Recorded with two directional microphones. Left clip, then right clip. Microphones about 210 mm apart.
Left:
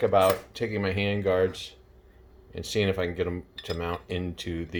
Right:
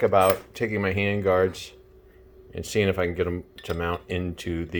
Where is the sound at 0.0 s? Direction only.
30° right (ahead or behind).